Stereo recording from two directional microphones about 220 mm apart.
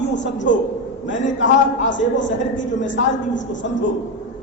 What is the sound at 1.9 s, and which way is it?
A woman's voice, 55° left (ahead or behind).